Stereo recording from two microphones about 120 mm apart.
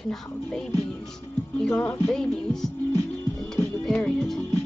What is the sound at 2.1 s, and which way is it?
Speech, 5° left (ahead or behind).